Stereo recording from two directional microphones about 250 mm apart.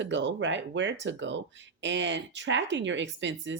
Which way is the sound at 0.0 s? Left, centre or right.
Right.